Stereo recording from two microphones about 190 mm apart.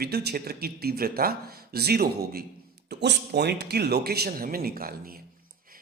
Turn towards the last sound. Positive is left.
turn(degrees=-50)  # may be behind; listen again after turning